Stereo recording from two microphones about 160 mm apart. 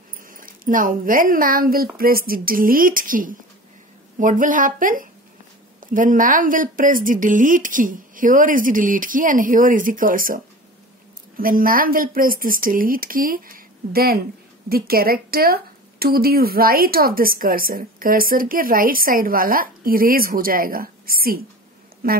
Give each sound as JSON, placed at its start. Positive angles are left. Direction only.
{"t": 0.3, "sound": "a woman's voice", "side_deg": -60}